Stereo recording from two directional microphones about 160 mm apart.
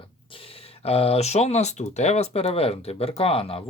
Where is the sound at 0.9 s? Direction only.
40° left (ahead or behind).